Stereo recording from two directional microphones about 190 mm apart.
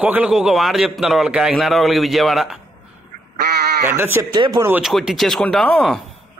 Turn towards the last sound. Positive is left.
turn(degrees=5)  # may be behind; listen again after turning